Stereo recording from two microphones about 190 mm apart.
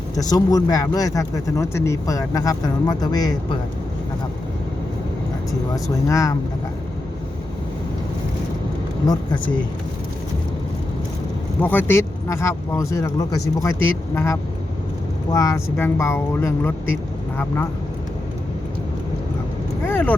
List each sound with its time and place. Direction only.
0.2 s speech: 20° left (ahead or behind)
6.1 s speech: 15° left (ahead or behind)
9.0 s speech: 25° left (ahead or behind)
11.6 s speech: 10° left (ahead or behind)
19.9 s speech: 10° left (ahead or behind)